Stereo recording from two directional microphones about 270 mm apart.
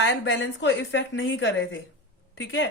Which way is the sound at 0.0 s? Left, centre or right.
Left.